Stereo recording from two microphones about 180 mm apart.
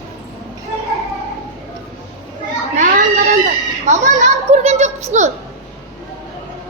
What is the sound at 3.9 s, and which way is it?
A child's voice, 40° right (ahead or behind).